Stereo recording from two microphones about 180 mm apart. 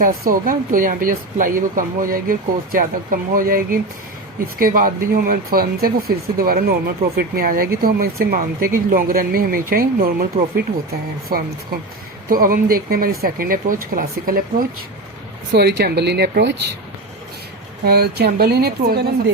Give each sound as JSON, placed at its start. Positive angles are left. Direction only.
{"t": 0.0, "sound": "speech", "side_deg": -50}
{"t": 11.3, "sound": "speech", "side_deg": -55}
{"t": 15.5, "sound": "speech", "side_deg": -65}
{"t": 17.8, "sound": "speech", "side_deg": -60}